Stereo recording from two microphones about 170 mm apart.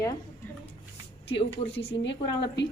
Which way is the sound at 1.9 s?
90° left.